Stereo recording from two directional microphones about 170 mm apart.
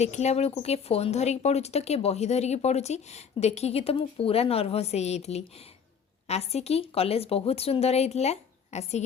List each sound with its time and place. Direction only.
0.0 s speech: 40° left (ahead or behind)